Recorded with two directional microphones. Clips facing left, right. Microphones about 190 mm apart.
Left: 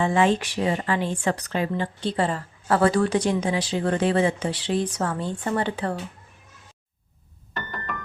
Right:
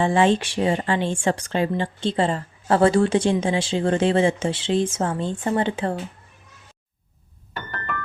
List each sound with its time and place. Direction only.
0.0 s speech: 30° right (ahead or behind)